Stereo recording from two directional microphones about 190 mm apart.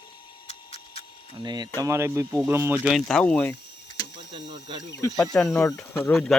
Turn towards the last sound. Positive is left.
turn(degrees=0)  # may be behind; listen again after turning